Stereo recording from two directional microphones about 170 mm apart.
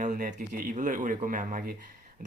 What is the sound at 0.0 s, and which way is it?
Speech, 45° right (ahead or behind).